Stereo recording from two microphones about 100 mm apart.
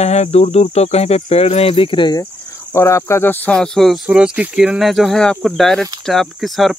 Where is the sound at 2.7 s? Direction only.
30° left (ahead or behind).